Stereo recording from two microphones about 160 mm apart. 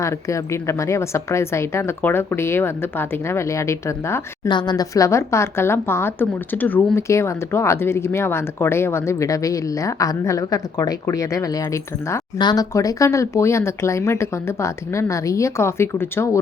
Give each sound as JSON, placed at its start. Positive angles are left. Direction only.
{"t": 0.0, "sound": "a woman's voice", "side_deg": 20}
{"t": 4.4, "sound": "a woman's voice", "side_deg": 30}